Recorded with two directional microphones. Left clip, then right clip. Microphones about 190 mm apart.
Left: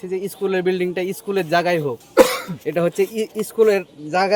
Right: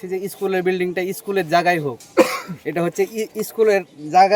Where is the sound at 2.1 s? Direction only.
60° left (ahead or behind).